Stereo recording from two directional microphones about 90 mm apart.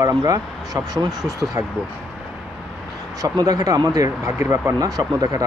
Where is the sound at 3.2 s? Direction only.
45° right (ahead or behind).